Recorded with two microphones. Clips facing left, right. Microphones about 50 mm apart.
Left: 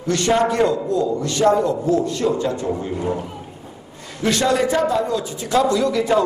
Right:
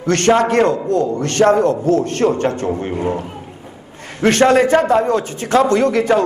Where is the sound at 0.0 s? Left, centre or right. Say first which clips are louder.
Right 4 dB; right.